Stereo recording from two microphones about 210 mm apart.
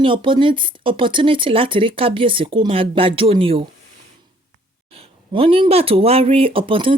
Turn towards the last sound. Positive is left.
turn(degrees=-25)  # may be behind; listen again after turning